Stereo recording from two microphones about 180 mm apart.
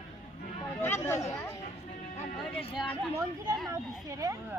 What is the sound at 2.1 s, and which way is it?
Music, 40° left (ahead or behind).